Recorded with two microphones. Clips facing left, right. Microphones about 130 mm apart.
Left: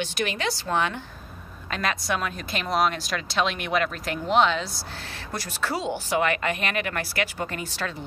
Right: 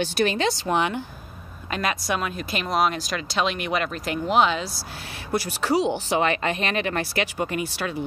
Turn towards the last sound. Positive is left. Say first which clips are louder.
# right 4 dB
turn(degrees=-15)  # may be behind; listen again after turning